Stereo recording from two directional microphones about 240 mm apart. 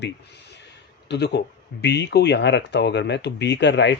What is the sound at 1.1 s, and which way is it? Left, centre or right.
Speech, left.